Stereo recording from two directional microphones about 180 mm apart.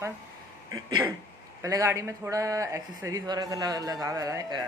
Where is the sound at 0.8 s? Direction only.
25° right (ahead or behind).